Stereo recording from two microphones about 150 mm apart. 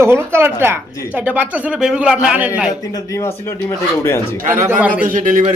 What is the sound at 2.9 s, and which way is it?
Speech, 20° left (ahead or behind).